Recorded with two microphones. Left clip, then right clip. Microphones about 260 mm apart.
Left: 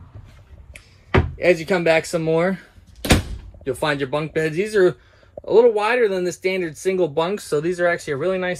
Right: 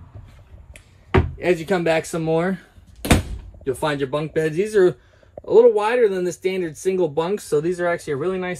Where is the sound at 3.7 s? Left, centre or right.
Centre.